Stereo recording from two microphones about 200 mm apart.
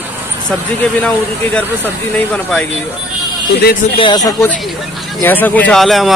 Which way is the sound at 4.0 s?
20° left (ahead or behind).